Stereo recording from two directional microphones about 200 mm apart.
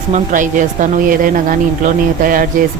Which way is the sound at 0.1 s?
40° right (ahead or behind).